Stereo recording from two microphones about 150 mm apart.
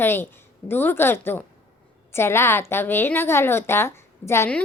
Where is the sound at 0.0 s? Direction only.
15° left (ahead or behind).